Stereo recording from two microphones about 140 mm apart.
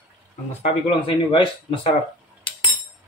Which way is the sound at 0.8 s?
35° left (ahead or behind).